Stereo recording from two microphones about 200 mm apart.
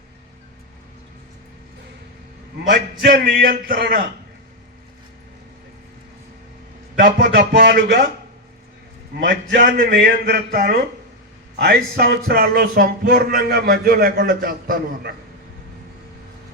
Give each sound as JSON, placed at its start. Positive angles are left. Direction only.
{"t": 2.6, "sound": "speech", "side_deg": -55}
{"t": 7.0, "sound": "a man's voice", "side_deg": -55}
{"t": 9.1, "sound": "speech", "side_deg": -50}